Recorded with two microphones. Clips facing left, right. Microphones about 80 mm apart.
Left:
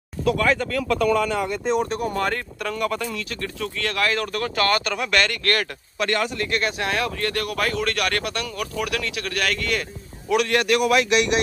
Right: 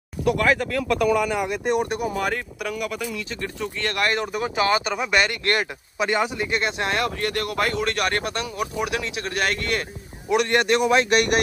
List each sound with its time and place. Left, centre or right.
0.2 s speech: centre; by 11.1 s right
11.1 s speech: right